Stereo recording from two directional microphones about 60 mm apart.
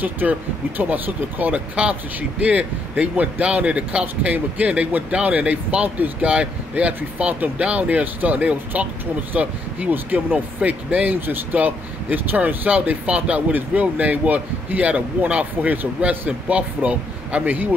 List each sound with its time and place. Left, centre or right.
0.0 s speech: right